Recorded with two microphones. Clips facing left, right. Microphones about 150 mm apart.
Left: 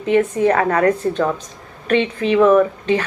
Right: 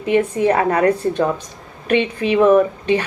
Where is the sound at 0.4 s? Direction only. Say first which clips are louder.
Even; 15° right (ahead or behind).